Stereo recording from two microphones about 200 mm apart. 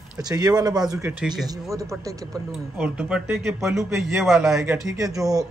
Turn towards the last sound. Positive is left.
turn(degrees=-15)  # may be behind; listen again after turning